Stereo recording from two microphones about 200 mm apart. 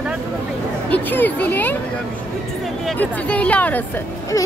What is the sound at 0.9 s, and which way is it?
Speech, 10° left (ahead or behind).